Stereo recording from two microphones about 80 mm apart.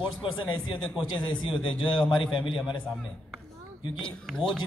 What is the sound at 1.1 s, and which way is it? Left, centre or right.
A man's voice, left.